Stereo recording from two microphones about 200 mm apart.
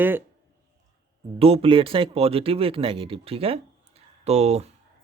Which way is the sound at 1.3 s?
30° right (ahead or behind).